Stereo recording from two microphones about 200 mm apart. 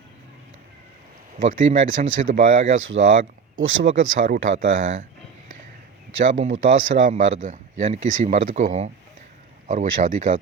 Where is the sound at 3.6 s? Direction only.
75° right (ahead or behind).